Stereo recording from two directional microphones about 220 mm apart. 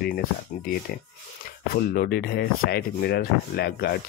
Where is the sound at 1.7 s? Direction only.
45° left (ahead or behind).